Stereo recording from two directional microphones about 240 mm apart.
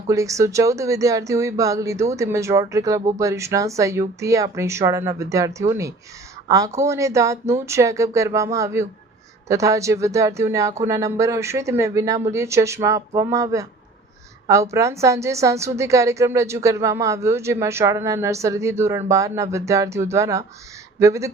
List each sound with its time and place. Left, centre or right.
0.1 s a woman's voice: centre